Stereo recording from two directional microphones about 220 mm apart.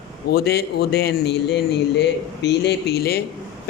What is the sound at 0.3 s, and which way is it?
A man's voice, 45° left (ahead or behind).